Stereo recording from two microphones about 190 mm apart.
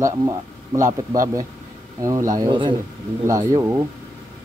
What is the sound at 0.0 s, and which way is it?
Speech, 15° right (ahead or behind).